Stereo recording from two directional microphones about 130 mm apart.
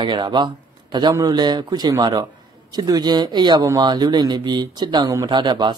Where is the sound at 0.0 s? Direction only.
35° right (ahead or behind).